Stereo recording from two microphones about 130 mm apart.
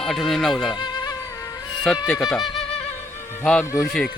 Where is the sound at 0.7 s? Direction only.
35° left (ahead or behind).